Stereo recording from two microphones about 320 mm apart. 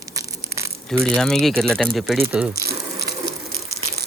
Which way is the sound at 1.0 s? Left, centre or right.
Centre.